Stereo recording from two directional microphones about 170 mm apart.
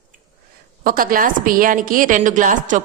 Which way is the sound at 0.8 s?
55° right (ahead or behind).